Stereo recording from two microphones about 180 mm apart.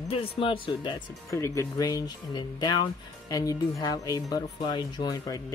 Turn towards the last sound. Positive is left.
turn(degrees=20)  # may be behind; listen again after turning